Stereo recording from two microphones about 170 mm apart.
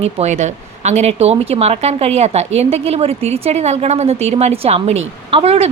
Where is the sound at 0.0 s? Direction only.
40° right (ahead or behind).